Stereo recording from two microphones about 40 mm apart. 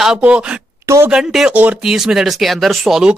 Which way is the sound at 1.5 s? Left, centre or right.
Right.